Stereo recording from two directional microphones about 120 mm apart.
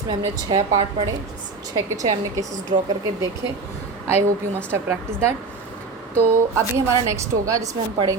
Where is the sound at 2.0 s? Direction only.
85° right.